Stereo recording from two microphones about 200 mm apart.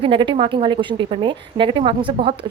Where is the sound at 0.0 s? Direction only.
25° right (ahead or behind).